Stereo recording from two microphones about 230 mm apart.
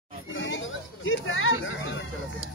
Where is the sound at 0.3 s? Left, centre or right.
Left.